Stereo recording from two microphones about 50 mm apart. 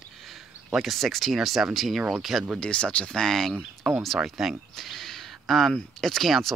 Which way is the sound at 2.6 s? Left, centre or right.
Left.